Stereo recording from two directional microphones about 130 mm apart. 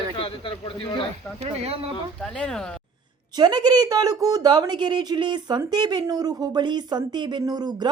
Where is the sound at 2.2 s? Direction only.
5° left (ahead or behind).